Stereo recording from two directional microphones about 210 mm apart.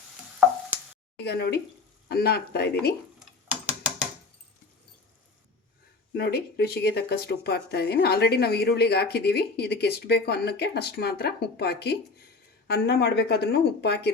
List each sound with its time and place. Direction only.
1.2 s speech: 50° left (ahead or behind)
6.1 s speech: 50° left (ahead or behind)